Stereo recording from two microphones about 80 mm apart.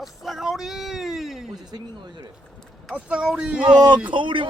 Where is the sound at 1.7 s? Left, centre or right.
Right.